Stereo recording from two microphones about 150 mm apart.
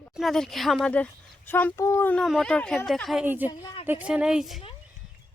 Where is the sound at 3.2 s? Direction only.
15° right (ahead or behind).